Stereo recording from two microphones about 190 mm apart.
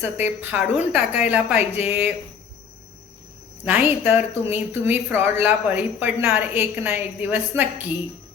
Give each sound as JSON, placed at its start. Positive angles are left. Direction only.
{"t": 0.0, "sound": "a woman's voice", "side_deg": -10}
{"t": 3.6, "sound": "a woman's voice", "side_deg": -10}